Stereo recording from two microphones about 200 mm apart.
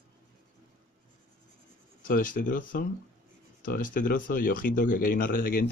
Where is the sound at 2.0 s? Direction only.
45° left (ahead or behind).